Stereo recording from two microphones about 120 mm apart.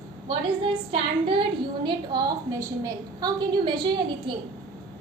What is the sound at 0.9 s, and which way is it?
A woman's voice, 50° right (ahead or behind).